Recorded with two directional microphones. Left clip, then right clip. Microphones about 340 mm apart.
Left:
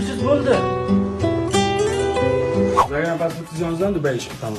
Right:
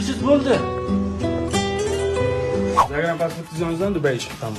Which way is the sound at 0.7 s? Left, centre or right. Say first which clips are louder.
Left 3 dB; centre.